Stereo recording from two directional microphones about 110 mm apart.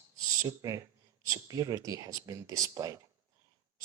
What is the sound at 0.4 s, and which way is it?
Speech, 30° right (ahead or behind).